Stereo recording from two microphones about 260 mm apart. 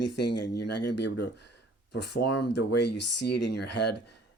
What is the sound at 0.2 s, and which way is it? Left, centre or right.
Speech, left.